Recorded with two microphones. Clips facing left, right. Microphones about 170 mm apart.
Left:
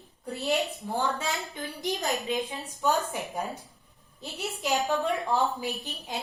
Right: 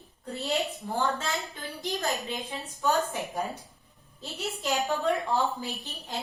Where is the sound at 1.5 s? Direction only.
15° left (ahead or behind).